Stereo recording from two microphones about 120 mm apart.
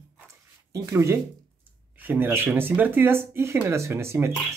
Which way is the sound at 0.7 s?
25° right (ahead or behind).